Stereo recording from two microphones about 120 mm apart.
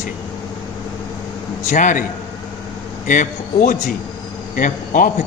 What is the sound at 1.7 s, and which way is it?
Speech, 90° left.